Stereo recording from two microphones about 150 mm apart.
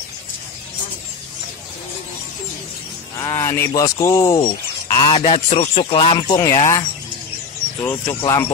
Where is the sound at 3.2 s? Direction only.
20° left (ahead or behind).